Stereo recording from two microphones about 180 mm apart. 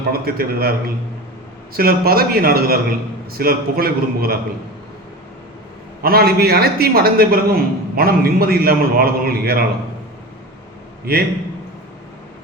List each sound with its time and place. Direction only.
0.1 s a man's voice: 60° right (ahead or behind)
6.0 s a man's voice: 55° right (ahead or behind)
11.0 s a man's voice: 60° right (ahead or behind)